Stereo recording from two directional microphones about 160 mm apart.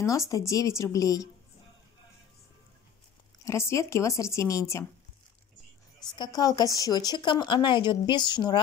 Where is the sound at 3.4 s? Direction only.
15° left (ahead or behind).